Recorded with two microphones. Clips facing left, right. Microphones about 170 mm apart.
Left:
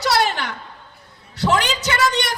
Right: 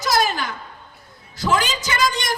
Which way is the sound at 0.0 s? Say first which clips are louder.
Left 1 dB; 70° left (ahead or behind).